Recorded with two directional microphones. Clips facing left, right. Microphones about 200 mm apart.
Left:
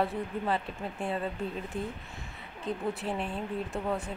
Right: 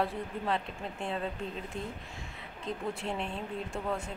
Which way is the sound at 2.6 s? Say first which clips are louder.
Left 3 dB; 5° left (ahead or behind).